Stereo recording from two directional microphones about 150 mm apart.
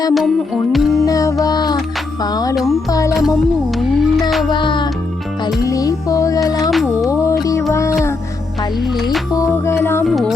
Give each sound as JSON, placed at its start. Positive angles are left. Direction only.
{"t": 0.1, "sound": "music", "side_deg": 0}
{"t": 1.0, "sound": "music", "side_deg": 20}
{"t": 2.6, "sound": "music", "side_deg": 0}
{"t": 2.9, "sound": "music", "side_deg": 20}
{"t": 3.8, "sound": "music", "side_deg": 0}
{"t": 4.4, "sound": "music", "side_deg": 30}
{"t": 7.7, "sound": "music", "side_deg": 20}
{"t": 9.3, "sound": "music", "side_deg": 20}
{"t": 10.0, "sound": "music", "side_deg": 0}